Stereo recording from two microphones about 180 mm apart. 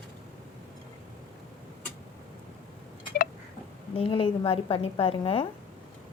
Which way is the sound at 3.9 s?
30° left (ahead or behind).